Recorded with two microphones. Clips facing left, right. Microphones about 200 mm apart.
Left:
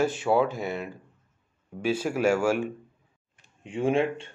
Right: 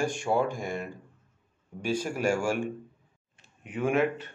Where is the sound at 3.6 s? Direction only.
25° left (ahead or behind).